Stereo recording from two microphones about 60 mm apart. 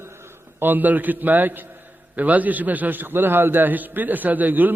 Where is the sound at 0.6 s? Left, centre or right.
Right.